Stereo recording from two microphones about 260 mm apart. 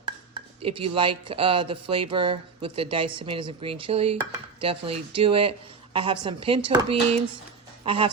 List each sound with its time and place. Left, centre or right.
0.6 s speech: right